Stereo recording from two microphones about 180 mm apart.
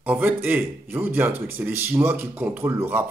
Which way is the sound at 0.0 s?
10° right (ahead or behind).